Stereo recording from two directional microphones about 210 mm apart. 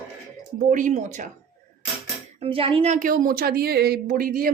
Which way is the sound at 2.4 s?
25° right (ahead or behind).